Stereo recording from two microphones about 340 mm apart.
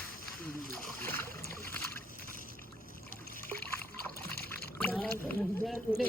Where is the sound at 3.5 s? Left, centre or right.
Centre.